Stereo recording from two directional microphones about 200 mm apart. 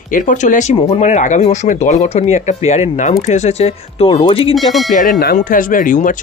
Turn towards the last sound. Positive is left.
turn(degrees=40)  # may be behind; listen again after turning